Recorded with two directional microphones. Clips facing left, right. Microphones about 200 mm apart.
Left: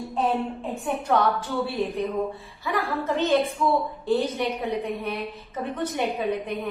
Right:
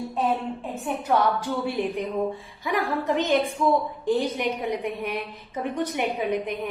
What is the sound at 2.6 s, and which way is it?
A woman's voice, 15° right (ahead or behind).